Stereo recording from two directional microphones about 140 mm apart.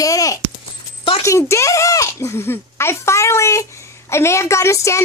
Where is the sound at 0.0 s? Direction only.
25° left (ahead or behind).